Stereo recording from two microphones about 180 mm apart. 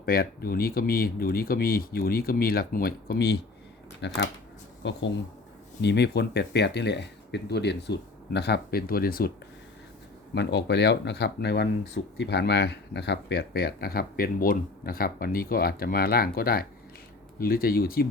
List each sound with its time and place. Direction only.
0.0 s speech: 60° left (ahead or behind); by 5.0 s 80° left
5.8 s speech: 70° left (ahead or behind)
10.3 s speech: 70° left (ahead or behind); by 18.1 s 55° left (ahead or behind)